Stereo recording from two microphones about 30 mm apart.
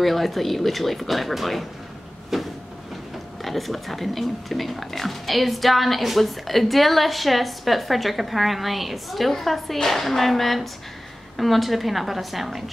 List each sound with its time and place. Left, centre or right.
0.0 s speech: centre
2.3 s vehicle: centre
3.4 s speech: centre
9.8 s a sound: centre
11.3 s speech: centre